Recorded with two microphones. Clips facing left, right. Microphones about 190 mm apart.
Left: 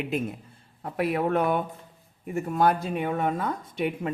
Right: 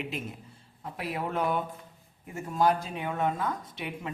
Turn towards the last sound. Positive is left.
turn(degrees=55)  # may be behind; listen again after turning